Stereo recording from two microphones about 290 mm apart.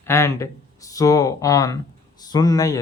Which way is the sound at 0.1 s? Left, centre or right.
Centre.